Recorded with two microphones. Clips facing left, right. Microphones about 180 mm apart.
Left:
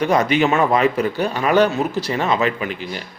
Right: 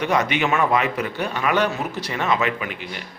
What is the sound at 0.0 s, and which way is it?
A man's voice, 35° left (ahead or behind).